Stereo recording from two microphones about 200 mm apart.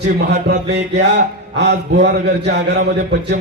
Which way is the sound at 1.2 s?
60° right (ahead or behind).